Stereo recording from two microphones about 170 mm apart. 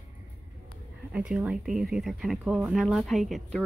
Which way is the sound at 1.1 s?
5° right (ahead or behind).